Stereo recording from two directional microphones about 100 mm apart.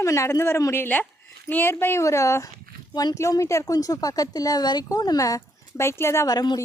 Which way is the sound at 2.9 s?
45° left (ahead or behind).